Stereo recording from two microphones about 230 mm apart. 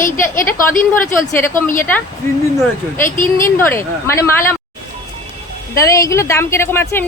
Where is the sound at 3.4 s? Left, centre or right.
Centre.